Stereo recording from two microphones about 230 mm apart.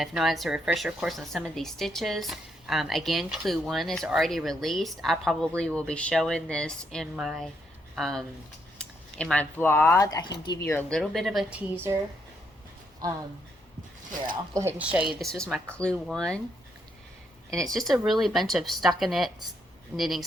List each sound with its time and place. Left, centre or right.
0.0 s a woman's voice: centre
10.7 s a woman's voice: centre
14.5 s a woman's voice: centre
17.7 s a woman's voice: centre